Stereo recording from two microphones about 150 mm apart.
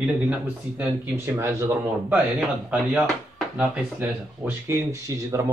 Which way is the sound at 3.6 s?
10° right (ahead or behind).